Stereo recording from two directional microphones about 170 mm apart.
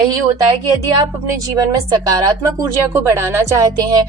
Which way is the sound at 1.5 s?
20° right (ahead or behind).